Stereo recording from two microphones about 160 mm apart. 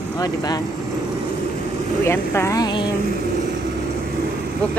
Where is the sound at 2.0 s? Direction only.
15° left (ahead or behind).